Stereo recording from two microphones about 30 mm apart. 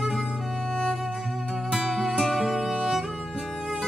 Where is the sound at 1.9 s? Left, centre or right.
Centre.